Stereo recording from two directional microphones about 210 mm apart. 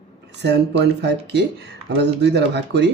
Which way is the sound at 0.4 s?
55° right (ahead or behind).